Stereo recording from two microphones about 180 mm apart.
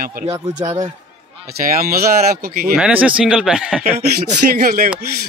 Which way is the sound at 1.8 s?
55° right (ahead or behind).